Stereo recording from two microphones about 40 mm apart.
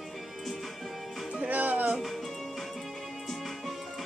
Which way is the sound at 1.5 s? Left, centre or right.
Right.